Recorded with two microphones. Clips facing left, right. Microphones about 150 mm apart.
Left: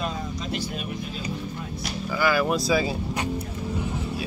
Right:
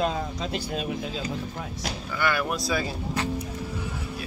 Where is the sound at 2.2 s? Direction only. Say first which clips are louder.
Left 4 dB; centre (ahead or behind).